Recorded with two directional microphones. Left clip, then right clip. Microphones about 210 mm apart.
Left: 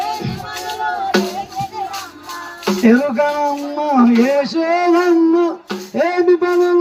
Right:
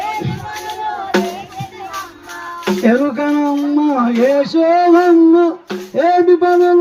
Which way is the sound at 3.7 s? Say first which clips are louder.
Left 3 dB; 50° right (ahead or behind).